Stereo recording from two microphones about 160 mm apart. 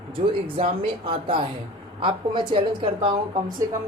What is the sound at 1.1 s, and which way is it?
Speech, 35° right (ahead or behind).